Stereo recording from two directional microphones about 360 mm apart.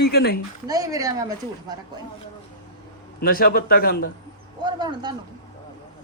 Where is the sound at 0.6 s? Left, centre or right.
Centre.